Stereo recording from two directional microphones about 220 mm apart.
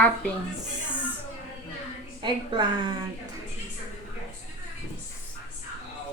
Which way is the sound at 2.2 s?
20° right (ahead or behind).